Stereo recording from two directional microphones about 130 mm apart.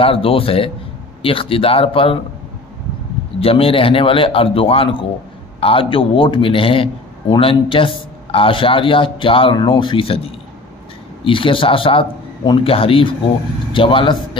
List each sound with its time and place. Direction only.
0.0 s a man's voice: 45° left (ahead or behind)
3.3 s a man's voice: 45° left (ahead or behind)
11.2 s a man's voice: 40° left (ahead or behind)